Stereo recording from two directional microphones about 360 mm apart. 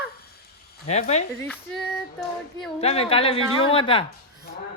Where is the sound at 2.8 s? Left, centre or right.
Centre.